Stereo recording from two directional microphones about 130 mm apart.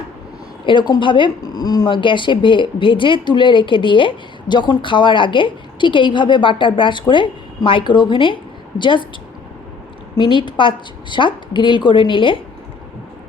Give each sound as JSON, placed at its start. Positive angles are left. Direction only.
{"t": 0.6, "sound": "speech", "side_deg": 40}
{"t": 10.2, "sound": "speech", "side_deg": 35}